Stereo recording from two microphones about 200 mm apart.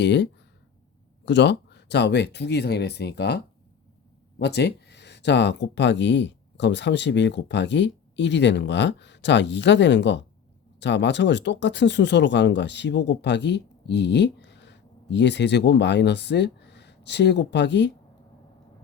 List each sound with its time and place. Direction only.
0.0 s speech: 60° left (ahead or behind)